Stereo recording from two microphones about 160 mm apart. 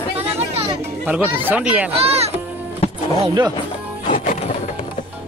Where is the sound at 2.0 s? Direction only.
40° right (ahead or behind).